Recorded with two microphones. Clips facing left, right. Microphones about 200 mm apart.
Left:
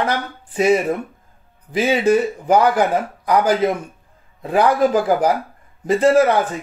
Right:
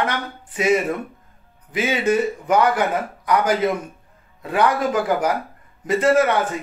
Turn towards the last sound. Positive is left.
turn(degrees=30)  # may be behind; listen again after turning